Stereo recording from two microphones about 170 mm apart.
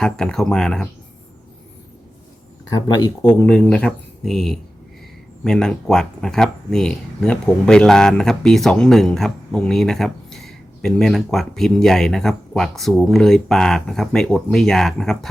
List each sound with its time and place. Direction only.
0.0 s speech: 5° left (ahead or behind)
2.6 s speech: 20° left (ahead or behind)
3.2 s speech: 10° left (ahead or behind)